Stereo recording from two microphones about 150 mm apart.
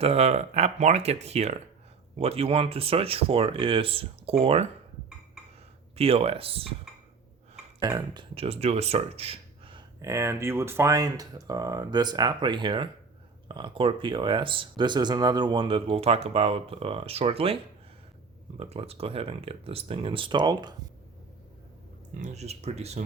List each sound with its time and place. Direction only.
0.0 s speech: 45° right (ahead or behind)
6.0 s speech: 40° right (ahead or behind)
7.8 s speech: 25° right (ahead or behind)
10.0 s speech: 20° right (ahead or behind)
22.2 s speech: 50° right (ahead or behind)